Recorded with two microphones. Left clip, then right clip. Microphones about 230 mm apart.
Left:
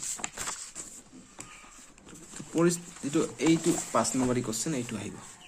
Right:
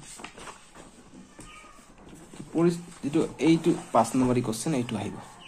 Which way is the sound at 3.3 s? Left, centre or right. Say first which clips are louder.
Right 3 dB; centre.